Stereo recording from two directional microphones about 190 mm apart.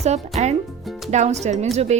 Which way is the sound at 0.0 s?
35° right (ahead or behind).